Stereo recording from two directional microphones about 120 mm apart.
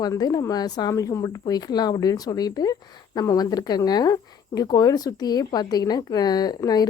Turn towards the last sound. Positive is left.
turn(degrees=35)  # may be behind; listen again after turning